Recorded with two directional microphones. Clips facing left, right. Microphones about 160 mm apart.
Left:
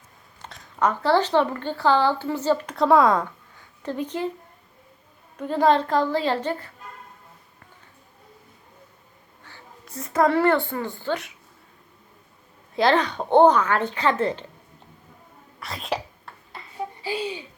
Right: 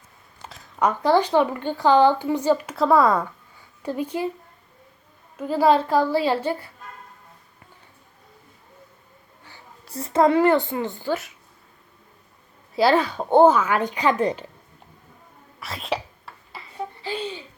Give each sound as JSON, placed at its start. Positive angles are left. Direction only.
{"t": 0.4, "sound": "a sound", "side_deg": 0}
{"t": 0.8, "sound": "a woman's voice", "side_deg": -15}
{"t": 5.4, "sound": "a woman's voice", "side_deg": -5}
{"t": 9.8, "sound": "a woman's voice", "side_deg": -30}
{"t": 12.7, "sound": "a woman's voice", "side_deg": -5}
{"t": 15.6, "sound": "whispering", "side_deg": 0}
{"t": 17.0, "sound": "a child's voice", "side_deg": 10}